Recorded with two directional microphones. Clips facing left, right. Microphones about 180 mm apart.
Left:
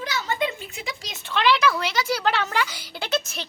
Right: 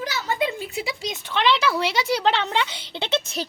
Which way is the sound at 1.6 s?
30° right (ahead or behind).